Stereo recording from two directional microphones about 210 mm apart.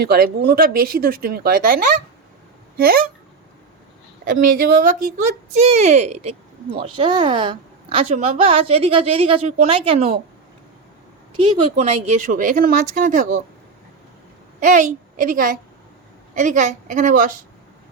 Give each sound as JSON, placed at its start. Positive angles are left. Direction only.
{"t": 0.0, "sound": "speech", "side_deg": -50}
{"t": 4.3, "sound": "speech", "side_deg": -40}
{"t": 5.5, "sound": "speech", "side_deg": -30}
{"t": 11.4, "sound": "speech", "side_deg": -30}
{"t": 14.6, "sound": "a woman's voice", "side_deg": -35}